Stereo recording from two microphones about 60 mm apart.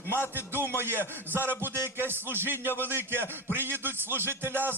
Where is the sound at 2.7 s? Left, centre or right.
Left.